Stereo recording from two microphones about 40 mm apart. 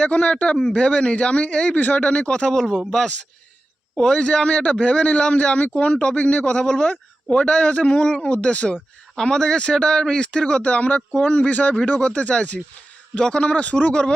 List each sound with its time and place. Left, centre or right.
0.0 s speech: left
2.5 s speech: centre
3.9 s a man's voice: centre
4.2 s a man's voice: left
9.1 s speech: centre
10.6 s a man's voice: left
11.7 s speech: left
13.4 s a man's voice: left